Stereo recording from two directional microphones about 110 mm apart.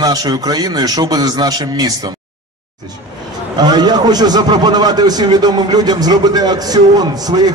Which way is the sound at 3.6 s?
40° right (ahead or behind).